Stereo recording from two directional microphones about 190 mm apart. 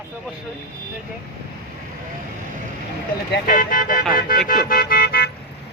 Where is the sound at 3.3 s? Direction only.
45° left (ahead or behind).